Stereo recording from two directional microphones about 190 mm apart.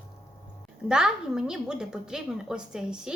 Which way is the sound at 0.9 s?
5° right (ahead or behind).